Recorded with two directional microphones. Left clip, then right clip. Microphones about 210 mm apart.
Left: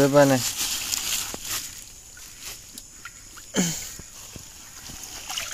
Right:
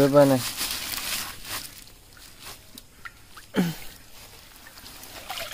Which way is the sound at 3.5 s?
20° right (ahead or behind).